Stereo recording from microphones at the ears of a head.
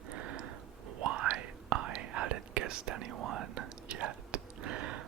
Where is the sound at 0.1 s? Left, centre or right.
Right.